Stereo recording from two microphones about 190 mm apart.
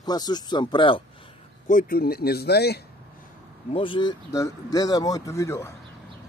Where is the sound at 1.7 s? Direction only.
50° left (ahead or behind).